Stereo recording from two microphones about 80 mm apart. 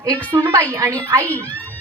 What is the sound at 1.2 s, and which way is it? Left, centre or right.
Speech, left.